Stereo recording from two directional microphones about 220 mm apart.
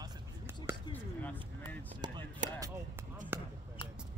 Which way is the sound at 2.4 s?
35° right (ahead or behind).